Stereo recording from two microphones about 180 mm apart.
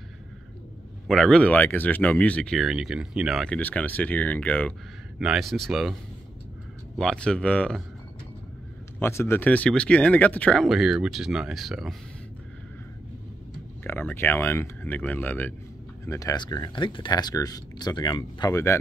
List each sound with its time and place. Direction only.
1.0 s speech: 5° left (ahead or behind)
7.0 s speech: 5° left (ahead or behind)
9.0 s speech: 15° left (ahead or behind)
13.8 s speech: 10° left (ahead or behind)